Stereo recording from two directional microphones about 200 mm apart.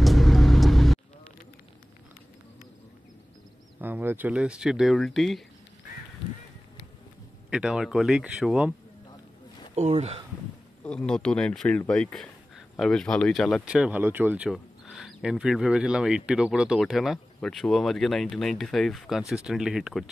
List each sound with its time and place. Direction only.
0.0 s vehicle: centre (ahead or behind)
3.8 s speech: 10° right (ahead or behind)
7.4 s speech: 5° right (ahead or behind)
9.8 s speech: 35° right (ahead or behind)
10.8 s speech: 5° left (ahead or behind)